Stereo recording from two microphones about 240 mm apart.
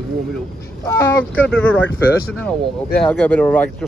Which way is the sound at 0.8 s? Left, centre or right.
Centre.